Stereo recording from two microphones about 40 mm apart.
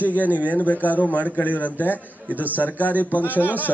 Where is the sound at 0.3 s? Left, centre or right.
Left.